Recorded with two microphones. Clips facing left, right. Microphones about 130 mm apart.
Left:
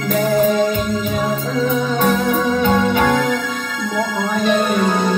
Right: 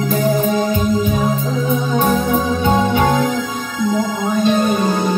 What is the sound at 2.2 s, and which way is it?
Music, 60° left (ahead or behind).